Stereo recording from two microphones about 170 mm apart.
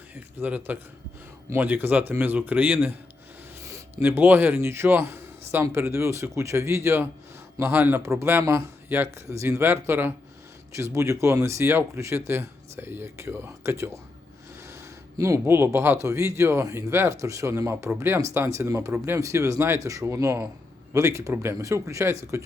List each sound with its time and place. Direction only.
0.3 s a man's voice: 10° right (ahead or behind)
15.2 s a man's voice: 15° right (ahead or behind)